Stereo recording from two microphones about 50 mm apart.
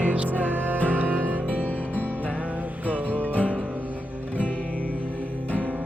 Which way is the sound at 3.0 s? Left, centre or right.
Right.